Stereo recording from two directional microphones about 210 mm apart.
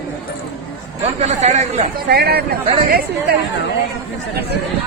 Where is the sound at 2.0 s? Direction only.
50° right (ahead or behind).